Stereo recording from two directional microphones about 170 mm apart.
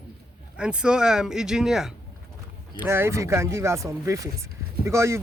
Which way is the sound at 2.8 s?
15° right (ahead or behind).